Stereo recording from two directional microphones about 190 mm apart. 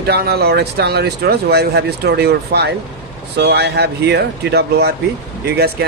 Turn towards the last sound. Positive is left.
turn(degrees=-55)  # may be behind; listen again after turning